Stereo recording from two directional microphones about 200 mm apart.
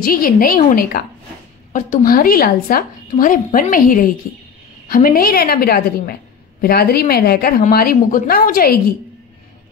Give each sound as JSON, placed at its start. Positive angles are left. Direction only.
{"t": 0.0, "sound": "a woman's voice", "side_deg": 45}